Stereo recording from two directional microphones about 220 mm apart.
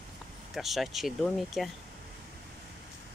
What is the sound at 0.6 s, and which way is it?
Speech, centre (ahead or behind).